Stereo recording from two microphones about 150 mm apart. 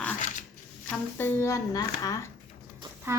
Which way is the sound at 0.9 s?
15° left (ahead or behind).